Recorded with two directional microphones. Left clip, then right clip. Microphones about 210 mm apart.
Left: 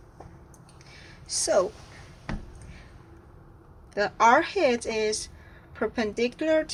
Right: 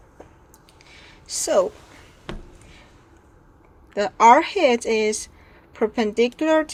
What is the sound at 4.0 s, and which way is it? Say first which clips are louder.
A woman's voice: right 6 dB; 40° right (ahead or behind).